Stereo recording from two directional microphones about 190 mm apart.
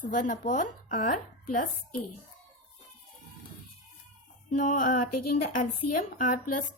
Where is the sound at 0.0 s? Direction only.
45° left (ahead or behind).